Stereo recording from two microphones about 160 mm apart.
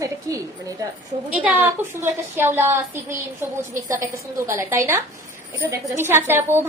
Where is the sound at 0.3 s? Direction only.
20° right (ahead or behind).